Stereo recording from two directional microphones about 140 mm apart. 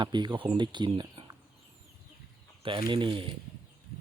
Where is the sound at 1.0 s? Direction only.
30° right (ahead or behind).